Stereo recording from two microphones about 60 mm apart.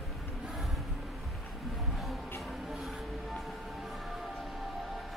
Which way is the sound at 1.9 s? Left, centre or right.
Centre.